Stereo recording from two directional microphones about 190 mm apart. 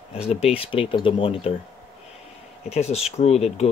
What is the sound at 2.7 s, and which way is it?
Speech, 35° left (ahead or behind).